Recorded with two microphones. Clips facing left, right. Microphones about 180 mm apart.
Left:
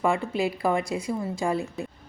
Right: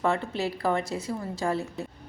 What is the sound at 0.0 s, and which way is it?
A woman's voice, 10° left (ahead or behind).